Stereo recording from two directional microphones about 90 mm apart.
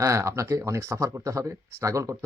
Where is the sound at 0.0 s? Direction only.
35° right (ahead or behind).